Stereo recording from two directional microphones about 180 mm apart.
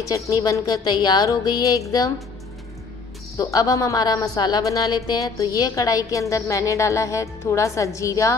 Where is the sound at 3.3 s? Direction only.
20° left (ahead or behind).